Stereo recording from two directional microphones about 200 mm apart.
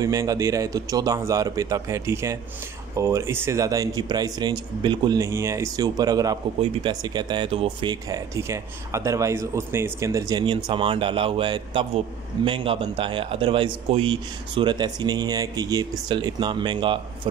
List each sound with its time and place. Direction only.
0.0 s speech: 15° right (ahead or behind)